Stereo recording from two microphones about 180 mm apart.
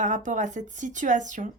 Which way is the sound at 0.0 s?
45° right (ahead or behind).